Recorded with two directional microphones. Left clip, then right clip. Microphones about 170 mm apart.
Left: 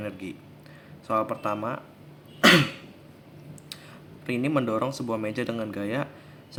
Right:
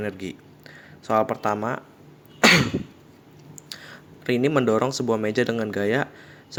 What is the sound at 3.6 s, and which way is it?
Speech, 35° right (ahead or behind).